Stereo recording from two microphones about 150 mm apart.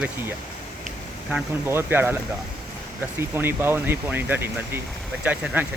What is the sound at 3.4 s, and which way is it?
Speech, 15° right (ahead or behind).